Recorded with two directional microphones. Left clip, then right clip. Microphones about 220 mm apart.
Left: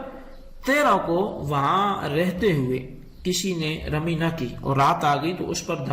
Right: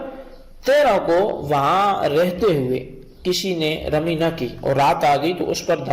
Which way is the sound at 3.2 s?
10° right (ahead or behind).